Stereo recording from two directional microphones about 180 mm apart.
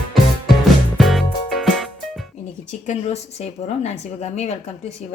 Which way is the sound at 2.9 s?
35° left (ahead or behind).